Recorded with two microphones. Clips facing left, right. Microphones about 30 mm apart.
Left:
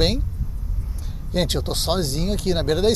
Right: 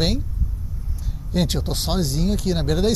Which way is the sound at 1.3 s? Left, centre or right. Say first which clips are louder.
Left 1 dB; centre.